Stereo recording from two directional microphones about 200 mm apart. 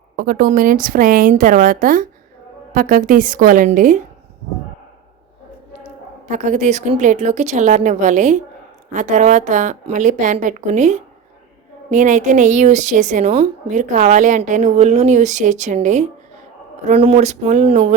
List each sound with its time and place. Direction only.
0.2 s a woman's voice: 45° right (ahead or behind)
6.2 s a woman's voice: 35° right (ahead or behind)